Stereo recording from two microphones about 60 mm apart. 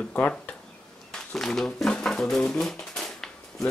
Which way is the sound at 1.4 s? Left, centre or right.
Centre.